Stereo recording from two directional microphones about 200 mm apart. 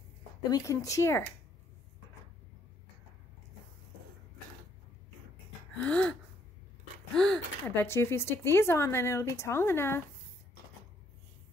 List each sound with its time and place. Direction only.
0.4 s speech: 15° left (ahead or behind)
5.8 s gasp: 5° left (ahead or behind)
7.2 s speech: 5° left (ahead or behind)